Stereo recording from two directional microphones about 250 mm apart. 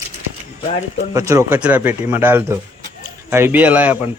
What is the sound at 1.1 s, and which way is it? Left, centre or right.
Speech, centre.